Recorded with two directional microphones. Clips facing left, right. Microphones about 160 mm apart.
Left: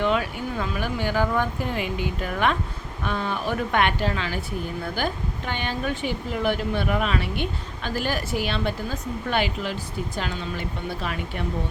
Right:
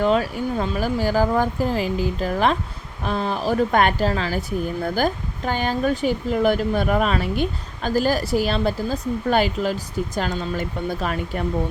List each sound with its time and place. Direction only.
0.0 s speech: 35° right (ahead or behind)